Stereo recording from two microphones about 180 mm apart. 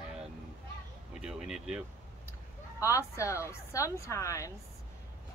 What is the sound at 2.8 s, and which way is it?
Speech, 15° left (ahead or behind).